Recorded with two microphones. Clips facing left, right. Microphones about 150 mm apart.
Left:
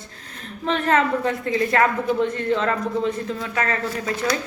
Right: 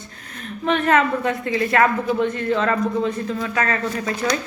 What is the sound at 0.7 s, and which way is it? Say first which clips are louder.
A woman's voice: right 2 dB; 30° left (ahead or behind).